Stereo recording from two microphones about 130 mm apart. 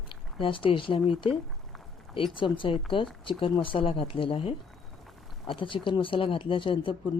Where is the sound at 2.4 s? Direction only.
40° left (ahead or behind).